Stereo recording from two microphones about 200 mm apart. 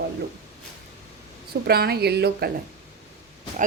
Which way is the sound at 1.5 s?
50° right (ahead or behind).